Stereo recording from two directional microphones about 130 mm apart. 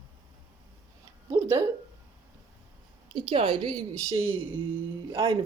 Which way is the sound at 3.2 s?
40° right (ahead or behind).